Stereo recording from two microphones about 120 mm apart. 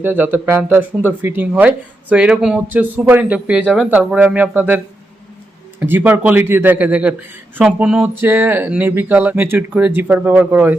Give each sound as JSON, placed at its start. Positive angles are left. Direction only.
{"t": 0.0, "sound": "speech", "side_deg": -15}
{"t": 5.8, "sound": "speech", "side_deg": -15}